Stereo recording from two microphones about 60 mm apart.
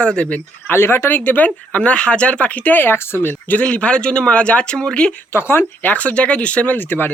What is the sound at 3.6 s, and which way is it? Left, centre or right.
Speech, centre.